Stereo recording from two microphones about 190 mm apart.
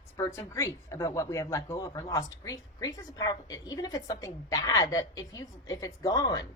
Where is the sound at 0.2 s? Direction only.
15° left (ahead or behind).